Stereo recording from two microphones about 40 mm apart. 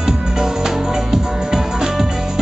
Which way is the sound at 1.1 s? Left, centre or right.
Centre.